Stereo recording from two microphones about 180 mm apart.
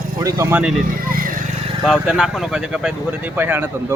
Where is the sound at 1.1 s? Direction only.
50° right (ahead or behind).